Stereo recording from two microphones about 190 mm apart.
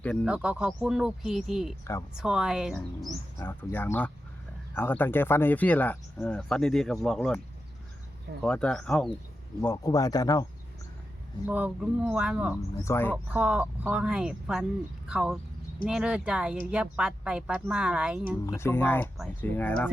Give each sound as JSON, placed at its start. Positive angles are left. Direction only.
{"t": 0.3, "sound": "speech", "side_deg": -5}
{"t": 1.8, "sound": "speech", "side_deg": 15}
{"t": 2.1, "sound": "speech", "side_deg": -5}
{"t": 3.3, "sound": "speech", "side_deg": 10}
{"t": 8.4, "sound": "speech", "side_deg": 5}
{"t": 9.6, "sound": "speech", "side_deg": 15}
{"t": 11.4, "sound": "speech", "side_deg": -5}
{"t": 12.8, "sound": "speech", "side_deg": 10}
{"t": 13.3, "sound": "speech", "side_deg": -5}
{"t": 18.4, "sound": "speech", "side_deg": 15}